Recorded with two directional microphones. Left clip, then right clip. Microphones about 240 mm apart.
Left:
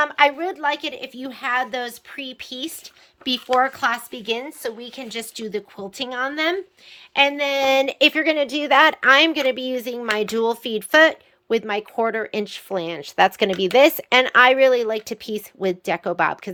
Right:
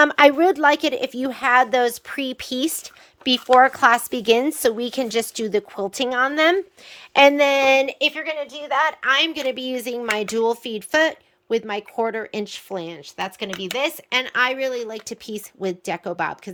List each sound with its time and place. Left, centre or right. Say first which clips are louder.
0.0 s a woman's voice: right 4 dB; right
3.2 s a woman's voice: right 5 dB; centre
8.1 s a woman's voice: left 7 dB; left
9.0 s speech: left 3 dB; centre
9.3 s speech: left 3 dB; centre